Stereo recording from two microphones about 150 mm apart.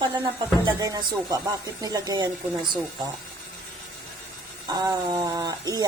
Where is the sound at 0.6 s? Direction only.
25° right (ahead or behind).